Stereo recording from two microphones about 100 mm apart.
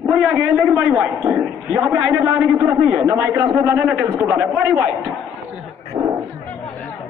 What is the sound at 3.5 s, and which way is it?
A man's voice, 25° right (ahead or behind).